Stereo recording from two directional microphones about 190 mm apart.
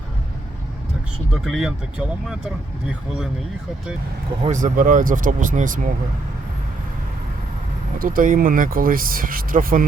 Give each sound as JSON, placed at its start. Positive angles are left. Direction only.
{"t": 1.3, "sound": "speech", "side_deg": 0}
{"t": 4.4, "sound": "speech", "side_deg": -45}
{"t": 7.9, "sound": "speech", "side_deg": -45}